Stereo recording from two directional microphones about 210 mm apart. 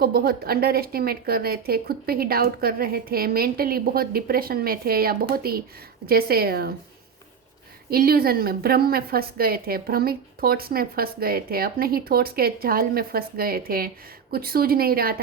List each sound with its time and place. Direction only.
0.0 s a woman's voice: 45° right (ahead or behind)
7.9 s a woman's voice: 45° right (ahead or behind)